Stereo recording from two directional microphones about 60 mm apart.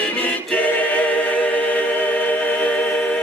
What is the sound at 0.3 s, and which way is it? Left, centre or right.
A capella, left.